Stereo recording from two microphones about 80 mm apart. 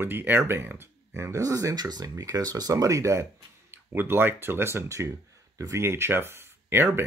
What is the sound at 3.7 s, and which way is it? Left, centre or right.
Speech, right.